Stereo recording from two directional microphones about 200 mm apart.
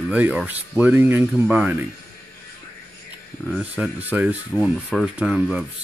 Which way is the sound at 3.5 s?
5° right (ahead or behind).